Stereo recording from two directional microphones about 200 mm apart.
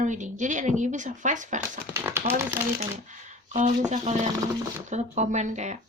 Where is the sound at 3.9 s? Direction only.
35° right (ahead or behind).